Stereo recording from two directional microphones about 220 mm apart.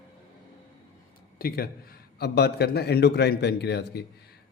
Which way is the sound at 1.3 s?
45° left (ahead or behind).